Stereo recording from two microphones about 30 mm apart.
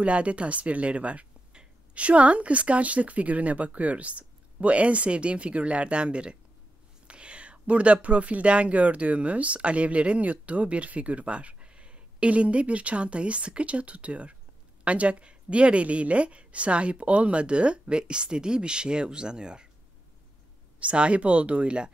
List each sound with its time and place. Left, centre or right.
0.0 s speech: right
20.8 s speech: right
21.6 s speech: right